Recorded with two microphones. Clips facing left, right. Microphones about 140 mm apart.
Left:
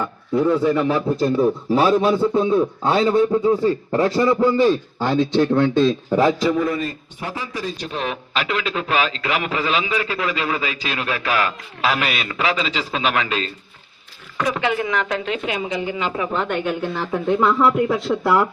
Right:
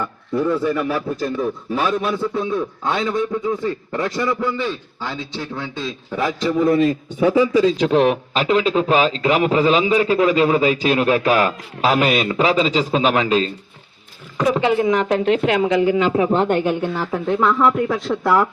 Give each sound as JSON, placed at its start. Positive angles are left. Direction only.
{"t": 0.0, "sound": "a man's voice", "side_deg": 15}
{"t": 5.0, "sound": "speech", "side_deg": 60}
{"t": 6.1, "sound": "a man's voice", "side_deg": 35}
{"t": 7.6, "sound": "a man's voice", "side_deg": -90}
{"t": 8.4, "sound": "a man's voice", "side_deg": -35}
{"t": 14.5, "sound": "a man's voice", "side_deg": -30}
{"t": 15.2, "sound": "speech", "side_deg": -55}
{"t": 16.3, "sound": "speech", "side_deg": -30}
{"t": 16.9, "sound": "speech", "side_deg": -5}